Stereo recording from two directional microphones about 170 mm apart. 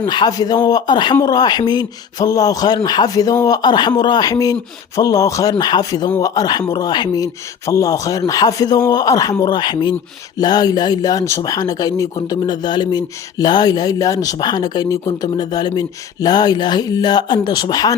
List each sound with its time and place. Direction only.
0.0 s speech: 25° left (ahead or behind)